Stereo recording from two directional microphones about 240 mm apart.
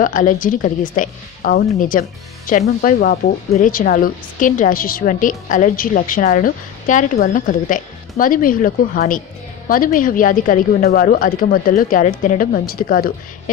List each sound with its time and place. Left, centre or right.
0.0 s a woman's voice: left